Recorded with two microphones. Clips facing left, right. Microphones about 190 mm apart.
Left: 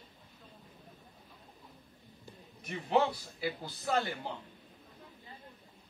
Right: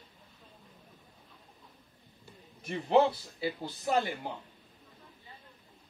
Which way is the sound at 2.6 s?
30° right (ahead or behind).